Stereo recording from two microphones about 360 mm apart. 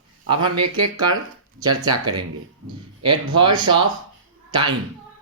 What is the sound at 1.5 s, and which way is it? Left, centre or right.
Speech, centre.